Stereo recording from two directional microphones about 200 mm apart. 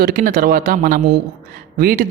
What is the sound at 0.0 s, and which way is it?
Speech, 45° right (ahead or behind).